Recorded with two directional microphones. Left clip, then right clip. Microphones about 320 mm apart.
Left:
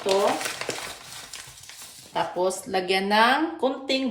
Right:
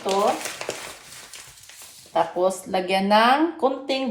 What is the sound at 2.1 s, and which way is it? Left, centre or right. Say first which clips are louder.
Speech: right 4 dB; centre.